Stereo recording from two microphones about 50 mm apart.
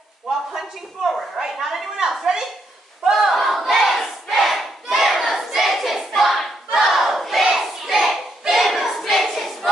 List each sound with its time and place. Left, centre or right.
1.0 s a woman's voice: centre
3.0 s a sound: centre
3.3 s battle cry: centre